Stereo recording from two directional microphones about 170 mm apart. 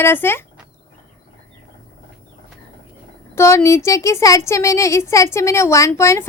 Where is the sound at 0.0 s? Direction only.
15° left (ahead or behind).